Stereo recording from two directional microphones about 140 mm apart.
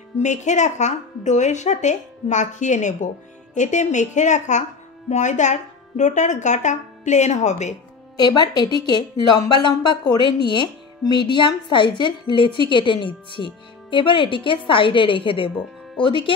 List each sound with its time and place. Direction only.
0.2 s speech: 55° left (ahead or behind)
8.2 s speech: 30° left (ahead or behind)